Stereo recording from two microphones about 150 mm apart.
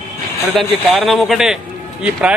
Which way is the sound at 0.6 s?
Centre (ahead or behind).